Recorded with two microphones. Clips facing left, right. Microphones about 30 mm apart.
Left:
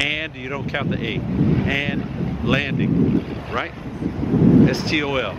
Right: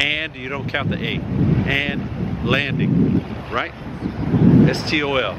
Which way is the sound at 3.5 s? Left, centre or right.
Right.